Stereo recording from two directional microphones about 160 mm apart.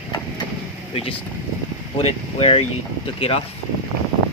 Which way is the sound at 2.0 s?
35° left (ahead or behind).